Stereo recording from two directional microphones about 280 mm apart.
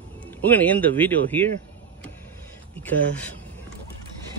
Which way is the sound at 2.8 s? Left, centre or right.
Centre.